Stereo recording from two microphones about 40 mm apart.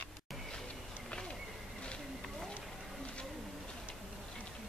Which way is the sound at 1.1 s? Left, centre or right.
Left.